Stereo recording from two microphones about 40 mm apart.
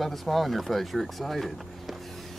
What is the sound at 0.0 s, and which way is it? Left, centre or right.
Speech, centre.